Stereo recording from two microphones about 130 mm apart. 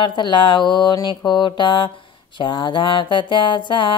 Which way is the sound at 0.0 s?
35° left (ahead or behind).